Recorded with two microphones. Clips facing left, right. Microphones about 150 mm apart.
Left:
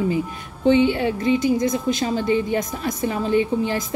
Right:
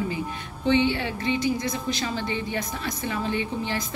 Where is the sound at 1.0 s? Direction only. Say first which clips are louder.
Left 6 dB; 40° left (ahead or behind).